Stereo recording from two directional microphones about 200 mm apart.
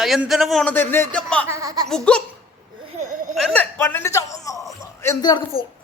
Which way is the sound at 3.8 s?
10° left (ahead or behind).